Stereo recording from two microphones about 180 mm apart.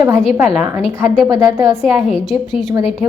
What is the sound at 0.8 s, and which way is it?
Speech, 35° left (ahead or behind).